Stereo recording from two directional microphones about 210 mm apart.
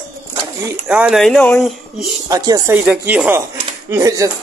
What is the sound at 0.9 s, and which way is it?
Speech, 5° right (ahead or behind).